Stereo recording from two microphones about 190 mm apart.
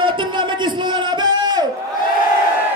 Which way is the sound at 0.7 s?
25° right (ahead or behind).